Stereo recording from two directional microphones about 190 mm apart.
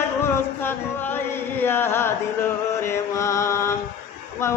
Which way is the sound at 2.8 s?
15° left (ahead or behind).